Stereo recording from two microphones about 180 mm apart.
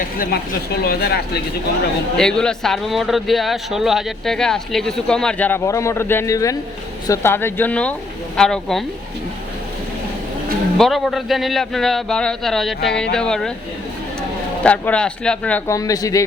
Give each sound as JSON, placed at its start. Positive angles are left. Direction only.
{"t": 0.9, "sound": "speech", "side_deg": 60}
{"t": 2.1, "sound": "speech", "side_deg": 5}
{"t": 10.8, "sound": "speech", "side_deg": 0}
{"t": 14.6, "sound": "speech", "side_deg": 5}